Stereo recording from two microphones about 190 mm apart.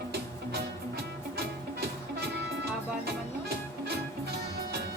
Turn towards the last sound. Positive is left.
turn(degrees=-60)  # may be behind; listen again after turning